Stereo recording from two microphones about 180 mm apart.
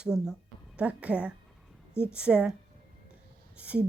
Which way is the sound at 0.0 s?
5° right (ahead or behind).